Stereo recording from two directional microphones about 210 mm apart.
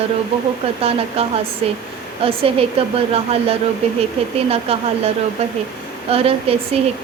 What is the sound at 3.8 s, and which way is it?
Speech, 30° right (ahead or behind).